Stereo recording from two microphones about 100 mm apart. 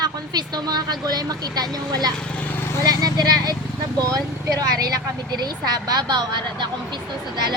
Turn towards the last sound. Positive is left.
turn(degrees=-50)  # may be behind; listen again after turning